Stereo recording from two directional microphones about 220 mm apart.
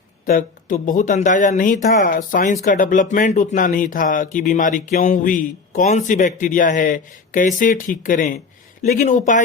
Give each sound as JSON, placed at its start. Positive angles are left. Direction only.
{"t": 0.3, "sound": "speech", "side_deg": 40}